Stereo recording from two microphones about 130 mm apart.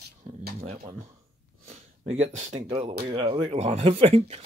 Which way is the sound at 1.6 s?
55° right (ahead or behind).